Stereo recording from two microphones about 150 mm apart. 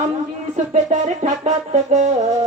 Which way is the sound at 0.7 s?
50° right (ahead or behind).